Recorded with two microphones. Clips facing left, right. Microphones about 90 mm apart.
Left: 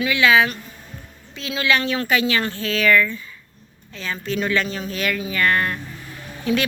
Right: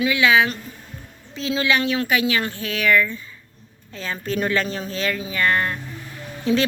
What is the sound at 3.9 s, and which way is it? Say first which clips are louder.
A woman's voice: even; 40° right (ahead or behind).